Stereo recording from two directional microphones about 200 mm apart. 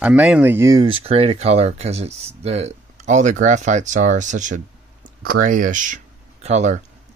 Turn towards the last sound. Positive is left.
turn(degrees=-35)  # may be behind; listen again after turning